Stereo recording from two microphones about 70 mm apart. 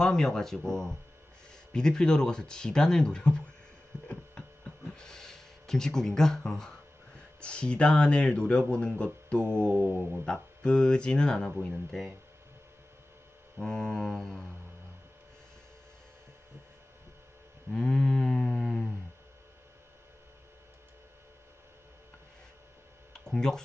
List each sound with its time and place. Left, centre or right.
0.0 s speech: centre
3.9 s hum: right
4.4 s hum: centre
4.9 s speech: centre
9.7 s speech: right
10.2 s speech: centre
11.9 s mantra: centre
13.7 s mantra: centre
17.7 s a sound: centre
23.1 s a sound: centre